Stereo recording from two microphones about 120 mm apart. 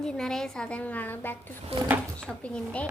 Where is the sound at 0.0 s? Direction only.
5° left (ahead or behind).